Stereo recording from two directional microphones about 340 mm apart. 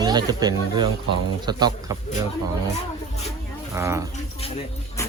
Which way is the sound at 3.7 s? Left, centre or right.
Centre.